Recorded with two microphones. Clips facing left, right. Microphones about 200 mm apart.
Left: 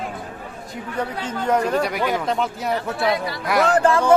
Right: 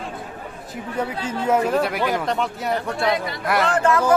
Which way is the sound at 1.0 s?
10° right (ahead or behind).